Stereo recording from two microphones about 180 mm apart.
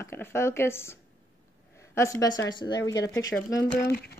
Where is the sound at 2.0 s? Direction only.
20° left (ahead or behind).